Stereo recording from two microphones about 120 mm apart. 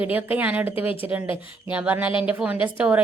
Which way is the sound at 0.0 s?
15° right (ahead or behind).